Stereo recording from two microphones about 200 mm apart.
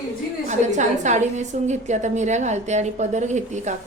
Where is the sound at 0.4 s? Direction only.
35° right (ahead or behind).